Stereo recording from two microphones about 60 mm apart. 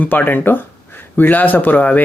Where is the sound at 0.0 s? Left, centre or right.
Left.